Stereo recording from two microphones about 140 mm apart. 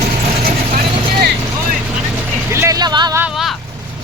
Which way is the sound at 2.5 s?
20° right (ahead or behind).